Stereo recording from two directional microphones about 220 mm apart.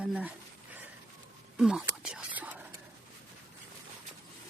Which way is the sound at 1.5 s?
Centre (ahead or behind).